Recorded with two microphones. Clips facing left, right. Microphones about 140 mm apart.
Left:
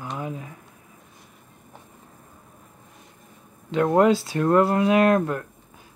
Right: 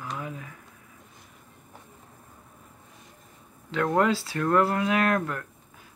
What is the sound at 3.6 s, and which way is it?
Speech, 20° left (ahead or behind).